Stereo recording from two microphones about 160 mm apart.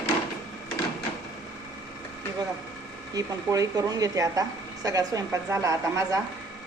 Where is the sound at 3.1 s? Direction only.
20° right (ahead or behind).